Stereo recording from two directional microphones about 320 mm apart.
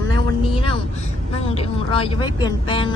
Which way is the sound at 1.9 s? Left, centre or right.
Centre.